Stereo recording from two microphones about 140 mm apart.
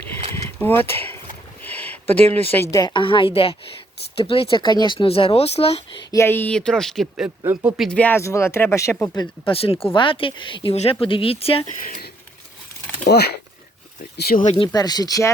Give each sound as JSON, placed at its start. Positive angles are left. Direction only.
{"t": 0.4, "sound": "speech", "side_deg": 15}
{"t": 1.6, "sound": "a sound", "side_deg": 10}
{"t": 2.7, "sound": "speech", "side_deg": 30}
{"t": 6.1, "sound": "speech", "side_deg": 20}
{"t": 7.4, "sound": "speech", "side_deg": -15}
{"t": 7.8, "sound": "speech", "side_deg": 10}
{"t": 9.5, "sound": "speech", "side_deg": 40}
{"t": 14.0, "sound": "speech", "side_deg": 90}
{"t": 14.5, "sound": "speech", "side_deg": 30}